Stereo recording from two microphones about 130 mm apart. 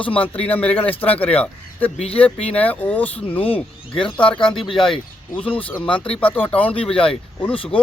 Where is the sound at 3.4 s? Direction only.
45° left (ahead or behind).